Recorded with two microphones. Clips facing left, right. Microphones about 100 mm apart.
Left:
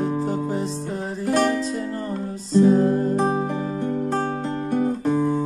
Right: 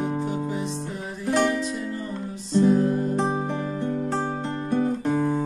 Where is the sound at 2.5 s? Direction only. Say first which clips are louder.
Left 3 dB; 35° left (ahead or behind).